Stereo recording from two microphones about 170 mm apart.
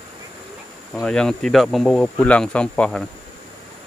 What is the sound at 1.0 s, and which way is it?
Speech, 5° left (ahead or behind).